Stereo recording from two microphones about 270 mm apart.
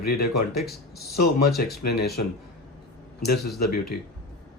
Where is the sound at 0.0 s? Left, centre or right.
Left.